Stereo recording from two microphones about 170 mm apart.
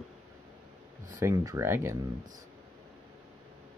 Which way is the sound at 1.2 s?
15° right (ahead or behind).